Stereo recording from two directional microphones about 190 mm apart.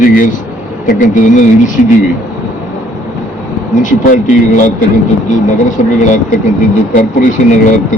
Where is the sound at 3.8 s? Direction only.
40° left (ahead or behind).